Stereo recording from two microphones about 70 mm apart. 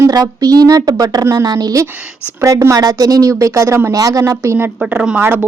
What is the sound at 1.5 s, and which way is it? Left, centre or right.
A woman's voice, right.